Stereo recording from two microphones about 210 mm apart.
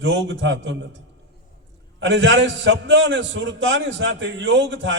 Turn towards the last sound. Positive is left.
turn(degrees=-60)  # may be behind; listen again after turning